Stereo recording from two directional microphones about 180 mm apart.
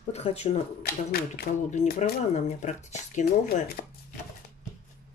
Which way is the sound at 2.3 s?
40° left (ahead or behind).